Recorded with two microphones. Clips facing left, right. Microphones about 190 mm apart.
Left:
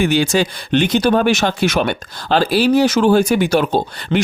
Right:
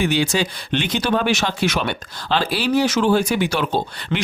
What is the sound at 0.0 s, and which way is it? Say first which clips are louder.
Speech: left 4 dB; 50° left (ahead or behind).